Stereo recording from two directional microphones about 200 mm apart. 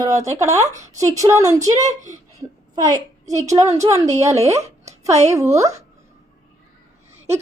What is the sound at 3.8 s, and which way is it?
Speech, 15° right (ahead or behind).